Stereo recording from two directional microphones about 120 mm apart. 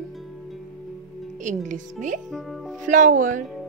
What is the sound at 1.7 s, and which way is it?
Speech, 90° right.